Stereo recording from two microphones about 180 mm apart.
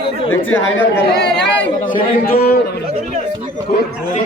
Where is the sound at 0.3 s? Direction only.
10° left (ahead or behind).